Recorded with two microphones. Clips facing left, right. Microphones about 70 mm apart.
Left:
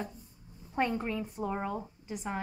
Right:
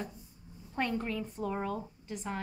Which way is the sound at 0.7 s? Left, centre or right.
Centre.